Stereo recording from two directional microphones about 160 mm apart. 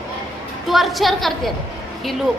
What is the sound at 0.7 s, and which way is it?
Speech, centre (ahead or behind).